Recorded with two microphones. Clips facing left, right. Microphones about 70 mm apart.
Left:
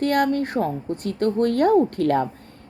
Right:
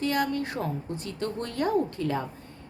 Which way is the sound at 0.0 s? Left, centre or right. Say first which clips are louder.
Left 7 dB; left.